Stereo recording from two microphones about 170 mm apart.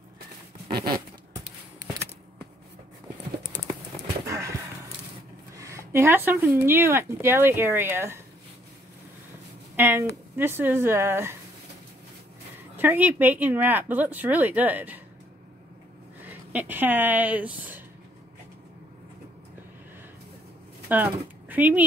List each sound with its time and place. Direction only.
0.7 s a sound: 25° right (ahead or behind)
4.3 s a sound: 15° right (ahead or behind)
5.6 s speech: 15° right (ahead or behind)
9.8 s speech: 15° right (ahead or behind)
12.7 s speech: 10° right (ahead or behind)
16.3 s speech: 10° right (ahead or behind)
20.9 s speech: 10° right (ahead or behind)